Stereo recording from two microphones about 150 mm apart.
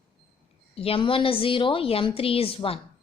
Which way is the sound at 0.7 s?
40° left (ahead or behind).